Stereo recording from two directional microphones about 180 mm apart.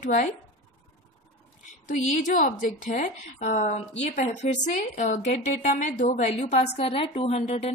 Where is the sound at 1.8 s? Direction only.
45° left (ahead or behind).